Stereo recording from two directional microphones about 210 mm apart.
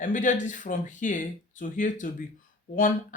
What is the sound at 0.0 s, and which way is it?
Speech, 35° left (ahead or behind).